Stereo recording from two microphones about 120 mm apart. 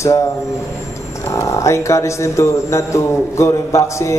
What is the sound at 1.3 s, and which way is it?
A man's voice, 25° left (ahead or behind).